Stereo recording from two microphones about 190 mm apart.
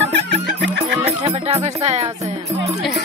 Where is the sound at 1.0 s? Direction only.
35° right (ahead or behind).